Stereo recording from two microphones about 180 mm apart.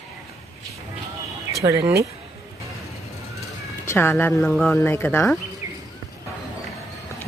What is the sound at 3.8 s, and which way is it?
Speech, 15° left (ahead or behind).